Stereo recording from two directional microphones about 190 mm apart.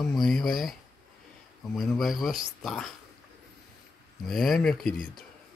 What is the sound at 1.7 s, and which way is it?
Speech, centre (ahead or behind).